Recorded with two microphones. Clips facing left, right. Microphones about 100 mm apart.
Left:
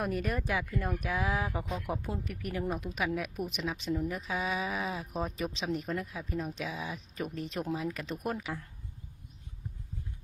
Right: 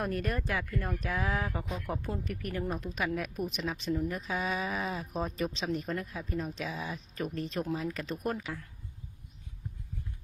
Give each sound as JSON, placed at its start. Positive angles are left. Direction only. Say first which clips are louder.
{"t": 0.0, "sound": "a woman's voice", "louder": "even", "side_deg": 0}